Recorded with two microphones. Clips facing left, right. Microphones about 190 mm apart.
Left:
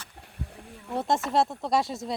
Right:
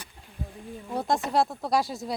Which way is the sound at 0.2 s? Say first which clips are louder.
Right 2 dB; 65° left (ahead or behind).